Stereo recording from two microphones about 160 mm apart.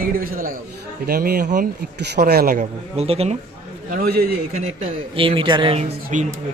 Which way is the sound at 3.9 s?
75° right (ahead or behind).